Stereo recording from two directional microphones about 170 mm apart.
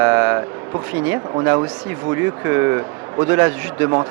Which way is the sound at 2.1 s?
15° right (ahead or behind).